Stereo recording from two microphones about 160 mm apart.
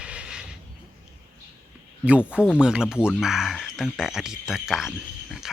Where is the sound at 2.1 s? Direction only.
10° right (ahead or behind).